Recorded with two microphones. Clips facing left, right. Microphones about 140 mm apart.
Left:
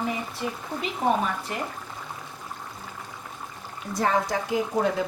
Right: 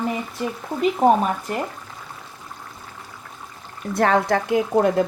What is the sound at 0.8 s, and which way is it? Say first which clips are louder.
Speech: right 8 dB; 45° right (ahead or behind).